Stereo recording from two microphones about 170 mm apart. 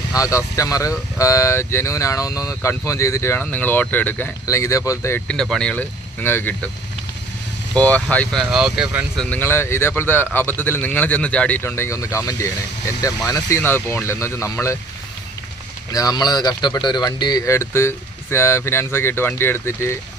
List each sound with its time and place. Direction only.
0.1 s speech: 20° left (ahead or behind)
7.7 s speech: 10° left (ahead or behind)
9.1 s speech: 5° left (ahead or behind)
15.9 s speech: 20° left (ahead or behind)